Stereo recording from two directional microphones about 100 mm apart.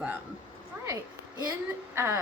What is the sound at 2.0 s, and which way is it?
Speech, 25° right (ahead or behind).